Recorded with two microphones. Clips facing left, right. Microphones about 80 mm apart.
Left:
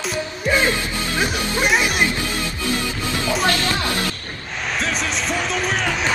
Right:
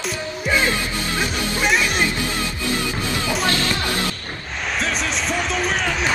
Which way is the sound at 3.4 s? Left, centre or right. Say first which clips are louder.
Left 1 dB; left.